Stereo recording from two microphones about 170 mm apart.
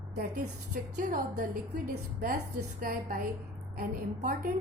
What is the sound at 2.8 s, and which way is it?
A woman's voice, 55° right (ahead or behind).